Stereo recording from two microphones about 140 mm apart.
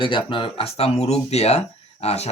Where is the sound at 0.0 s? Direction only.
35° left (ahead or behind).